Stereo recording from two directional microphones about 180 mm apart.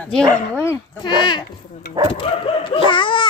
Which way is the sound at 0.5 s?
15° left (ahead or behind).